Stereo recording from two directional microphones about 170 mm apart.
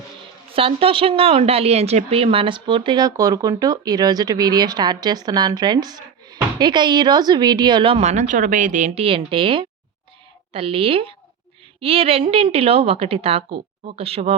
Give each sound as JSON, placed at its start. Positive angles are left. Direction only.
{"t": 0.5, "sound": "a woman's voice", "side_deg": -35}